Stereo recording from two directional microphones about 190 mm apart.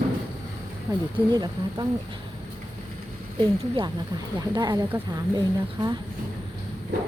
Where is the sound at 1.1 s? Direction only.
25° right (ahead or behind).